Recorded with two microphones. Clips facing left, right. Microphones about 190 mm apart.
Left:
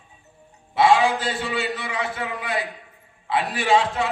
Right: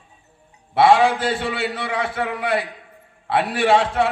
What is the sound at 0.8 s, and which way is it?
A man's voice, 60° right (ahead or behind).